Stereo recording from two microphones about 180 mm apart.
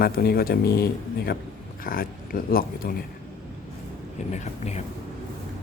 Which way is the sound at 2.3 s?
50° left (ahead or behind).